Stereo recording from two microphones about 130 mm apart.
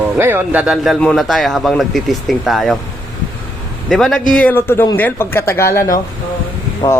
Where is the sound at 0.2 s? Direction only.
15° right (ahead or behind).